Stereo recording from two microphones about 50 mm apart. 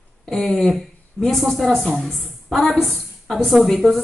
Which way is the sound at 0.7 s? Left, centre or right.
Centre.